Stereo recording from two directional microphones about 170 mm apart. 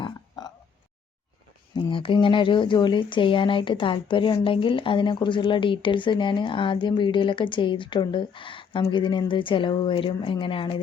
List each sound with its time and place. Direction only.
1.7 s speech: 30° left (ahead or behind)